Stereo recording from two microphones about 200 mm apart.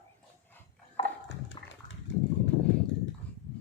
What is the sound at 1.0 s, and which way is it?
Dog, 30° left (ahead or behind).